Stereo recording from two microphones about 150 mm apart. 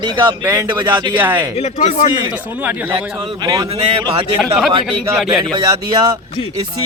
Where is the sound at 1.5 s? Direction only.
45° left (ahead or behind).